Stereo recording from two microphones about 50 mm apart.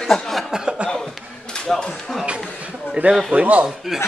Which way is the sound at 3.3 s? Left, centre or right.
Right.